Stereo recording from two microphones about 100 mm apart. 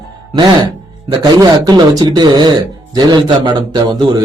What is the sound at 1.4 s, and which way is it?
Speech, 40° right (ahead or behind).